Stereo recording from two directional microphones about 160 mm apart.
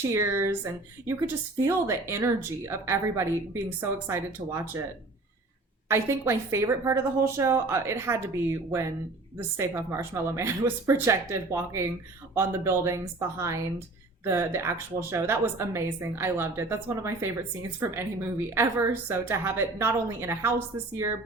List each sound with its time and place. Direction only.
0.1 s a woman's voice: 15° right (ahead or behind)
5.9 s a woman's voice: 15° right (ahead or behind)